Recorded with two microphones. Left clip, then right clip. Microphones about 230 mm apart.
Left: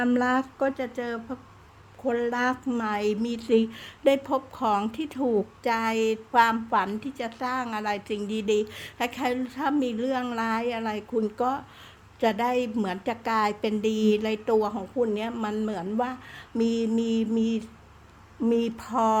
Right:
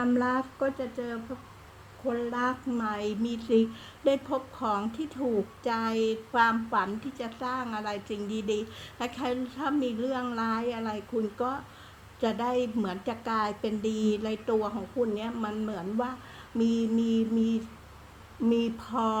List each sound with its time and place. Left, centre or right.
0.0 s a woman's voice: left